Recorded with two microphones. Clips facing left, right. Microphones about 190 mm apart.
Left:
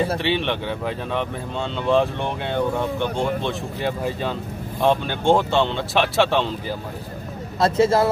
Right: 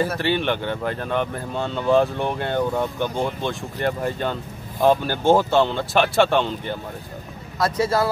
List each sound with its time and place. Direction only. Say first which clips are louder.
0.2 s speech: right 1 dB; centre (ahead or behind)
7.5 s speech: left 4 dB; 25° left (ahead or behind)